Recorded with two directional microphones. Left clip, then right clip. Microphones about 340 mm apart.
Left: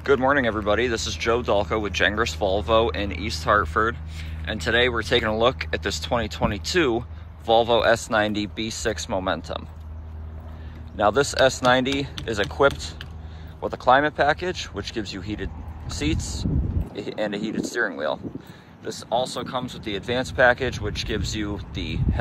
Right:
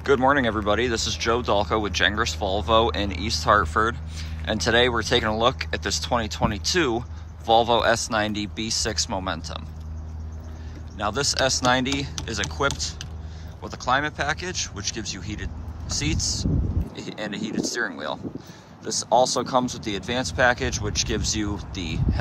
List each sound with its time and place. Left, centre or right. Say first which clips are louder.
0.0 s speech: even; centre
11.0 s speech: left 5 dB; centre